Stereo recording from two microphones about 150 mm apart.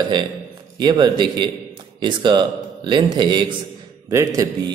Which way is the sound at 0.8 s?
30° right (ahead or behind).